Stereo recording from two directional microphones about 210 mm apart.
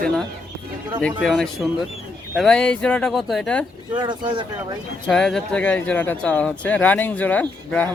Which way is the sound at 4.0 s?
20° right (ahead or behind).